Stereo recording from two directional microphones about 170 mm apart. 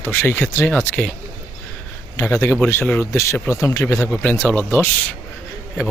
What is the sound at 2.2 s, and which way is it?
A man's voice, 15° left (ahead or behind).